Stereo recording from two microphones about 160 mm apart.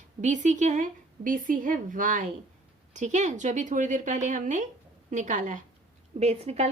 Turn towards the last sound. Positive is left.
turn(degrees=-40)  # may be behind; listen again after turning